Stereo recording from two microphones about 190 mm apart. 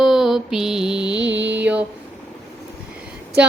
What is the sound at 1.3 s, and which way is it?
Mantra, 70° right (ahead or behind).